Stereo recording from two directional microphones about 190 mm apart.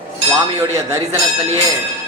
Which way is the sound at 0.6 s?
15° right (ahead or behind).